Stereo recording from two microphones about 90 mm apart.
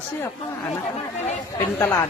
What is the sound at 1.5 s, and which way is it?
Speech, 30° left (ahead or behind).